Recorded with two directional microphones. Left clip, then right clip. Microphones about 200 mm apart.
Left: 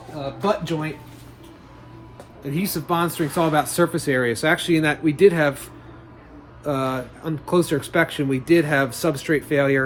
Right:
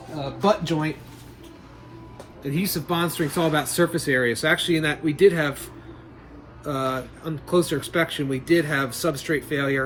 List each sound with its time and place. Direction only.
0.4 s speech: centre (ahead or behind)
2.4 s speech: 15° left (ahead or behind)
6.7 s speech: 30° left (ahead or behind)